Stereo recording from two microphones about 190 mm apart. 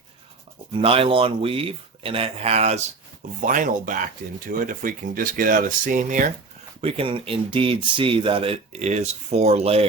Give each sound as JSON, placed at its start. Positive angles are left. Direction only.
{"t": 0.7, "sound": "speech", "side_deg": -30}
{"t": 6.8, "sound": "speech", "side_deg": -30}